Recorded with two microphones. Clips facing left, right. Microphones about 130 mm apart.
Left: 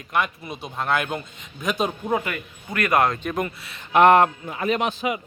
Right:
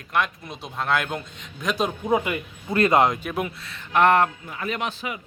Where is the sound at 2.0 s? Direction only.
10° right (ahead or behind).